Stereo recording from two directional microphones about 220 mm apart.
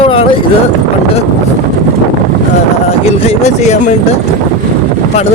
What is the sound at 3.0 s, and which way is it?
Speech, 30° left (ahead or behind).